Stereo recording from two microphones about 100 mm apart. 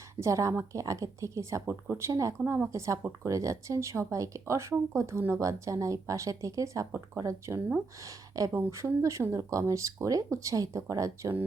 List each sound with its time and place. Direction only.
0.2 s speech: 30° right (ahead or behind)